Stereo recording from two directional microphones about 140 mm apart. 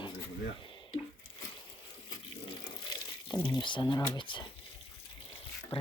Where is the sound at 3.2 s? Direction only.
30° left (ahead or behind).